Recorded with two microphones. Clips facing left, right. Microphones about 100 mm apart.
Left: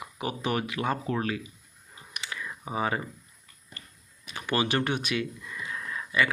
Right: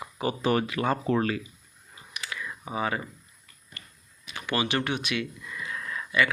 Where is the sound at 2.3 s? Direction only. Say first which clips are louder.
Even; 30° left (ahead or behind).